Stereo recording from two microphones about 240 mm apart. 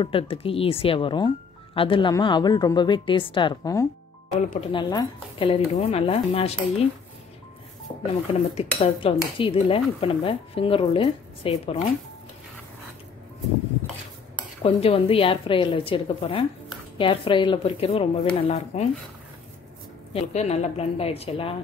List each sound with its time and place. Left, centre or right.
0.0 s speech: left
8.1 s speech: left
14.6 s speech: left
20.1 s speech: left